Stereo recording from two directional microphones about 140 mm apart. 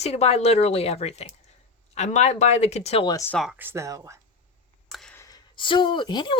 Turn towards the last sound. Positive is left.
turn(degrees=30)  # may be behind; listen again after turning